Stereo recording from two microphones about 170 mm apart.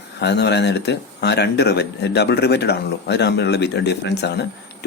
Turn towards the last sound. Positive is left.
turn(degrees=80)